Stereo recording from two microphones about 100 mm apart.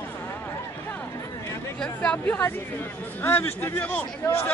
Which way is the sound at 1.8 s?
10° left (ahead or behind).